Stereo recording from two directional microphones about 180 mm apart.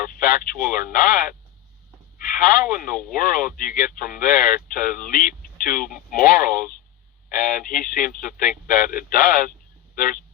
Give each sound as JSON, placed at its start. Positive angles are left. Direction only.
{"t": 0.1, "sound": "speech", "side_deg": 50}